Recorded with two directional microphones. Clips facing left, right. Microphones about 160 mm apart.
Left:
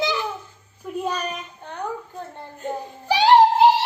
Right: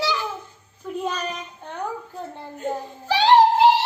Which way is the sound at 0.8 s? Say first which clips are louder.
Left 1 dB; 10° left (ahead or behind).